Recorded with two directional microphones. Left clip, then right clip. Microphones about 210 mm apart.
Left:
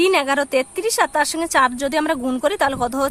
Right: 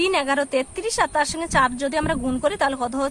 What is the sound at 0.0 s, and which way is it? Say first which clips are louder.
Speech: left 4 dB; 15° left (ahead or behind).